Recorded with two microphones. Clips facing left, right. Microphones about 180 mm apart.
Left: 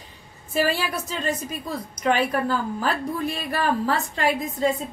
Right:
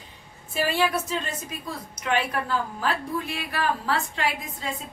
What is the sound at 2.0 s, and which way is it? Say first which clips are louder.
A woman's voice: left 4 dB; 40° left (ahead or behind).